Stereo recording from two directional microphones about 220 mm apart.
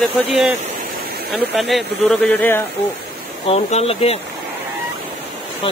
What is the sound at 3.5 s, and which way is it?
Speech, 30° left (ahead or behind).